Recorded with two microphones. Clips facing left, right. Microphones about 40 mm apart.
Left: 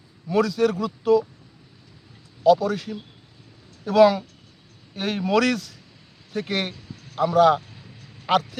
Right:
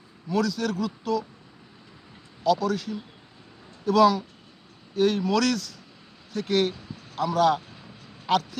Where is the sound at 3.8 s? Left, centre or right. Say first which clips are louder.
Left 3 dB; left.